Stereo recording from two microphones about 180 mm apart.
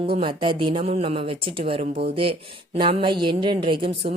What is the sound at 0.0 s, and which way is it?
Speech, 30° right (ahead or behind).